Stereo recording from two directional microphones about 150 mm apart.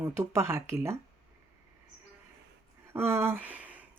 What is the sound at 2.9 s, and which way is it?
Speech, 15° right (ahead or behind).